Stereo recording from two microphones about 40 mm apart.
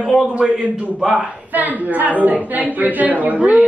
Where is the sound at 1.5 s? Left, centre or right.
Right.